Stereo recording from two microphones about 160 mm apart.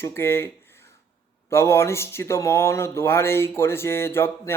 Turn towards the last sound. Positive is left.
turn(degrees=15)  # may be behind; listen again after turning